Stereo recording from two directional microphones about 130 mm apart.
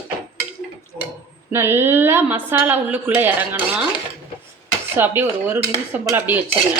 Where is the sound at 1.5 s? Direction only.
20° right (ahead or behind).